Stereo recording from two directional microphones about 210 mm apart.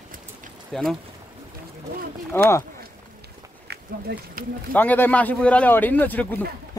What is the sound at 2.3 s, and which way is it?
Speech, 10° left (ahead or behind).